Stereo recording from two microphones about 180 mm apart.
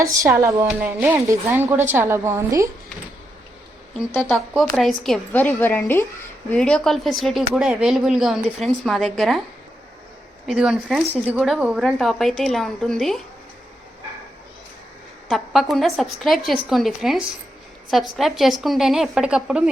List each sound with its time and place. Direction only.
0.0 s speech: 15° right (ahead or behind)
4.3 s a woman's voice: centre (ahead or behind)
10.4 s a woman's voice: 5° right (ahead or behind)
15.3 s a woman's voice: centre (ahead or behind)